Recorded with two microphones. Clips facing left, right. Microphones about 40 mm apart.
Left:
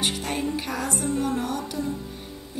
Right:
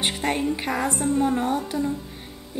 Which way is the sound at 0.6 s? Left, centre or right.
Right.